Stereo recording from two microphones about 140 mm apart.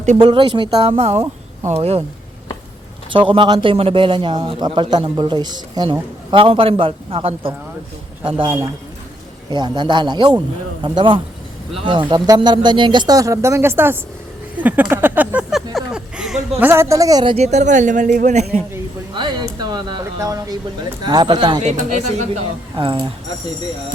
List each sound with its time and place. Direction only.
0.2 s a man's voice: 35° right (ahead or behind)
3.1 s a man's voice: 35° right (ahead or behind); by 16.6 s 5° right (ahead or behind)
16.6 s speech: 20° right (ahead or behind)
17.3 s speech: 55° right (ahead or behind)
19.1 s a man's voice: 30° right (ahead or behind)
21.6 s speech: 55° right (ahead or behind)
22.7 s a man's voice: 35° right (ahead or behind)